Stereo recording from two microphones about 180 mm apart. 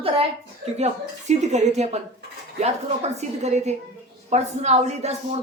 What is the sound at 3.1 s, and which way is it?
A woman's voice, 40° right (ahead or behind).